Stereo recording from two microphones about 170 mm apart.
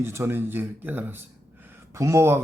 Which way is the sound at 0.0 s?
15° right (ahead or behind).